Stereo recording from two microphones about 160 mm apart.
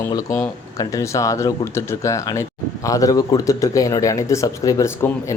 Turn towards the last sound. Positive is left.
turn(degrees=20)  # may be behind; listen again after turning